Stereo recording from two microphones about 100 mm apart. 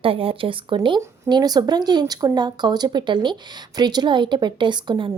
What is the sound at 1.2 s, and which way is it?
Speech, 45° right (ahead or behind).